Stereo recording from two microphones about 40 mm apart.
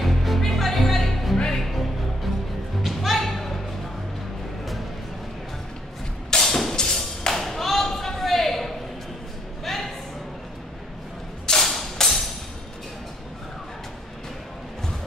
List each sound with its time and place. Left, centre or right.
0.0 s music: centre
2.8 s music: centre
6.3 s music: centre
9.7 s a sound: centre
11.4 s a sound: centre
11.7 s music: centre